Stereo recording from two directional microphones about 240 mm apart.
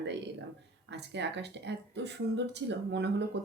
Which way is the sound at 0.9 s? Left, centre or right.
Right.